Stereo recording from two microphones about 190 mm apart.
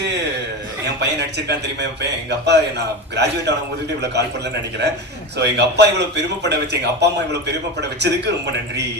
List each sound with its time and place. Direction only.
0.9 s a man's voice: 60° right (ahead or behind)
5.4 s a man's voice: 60° right (ahead or behind)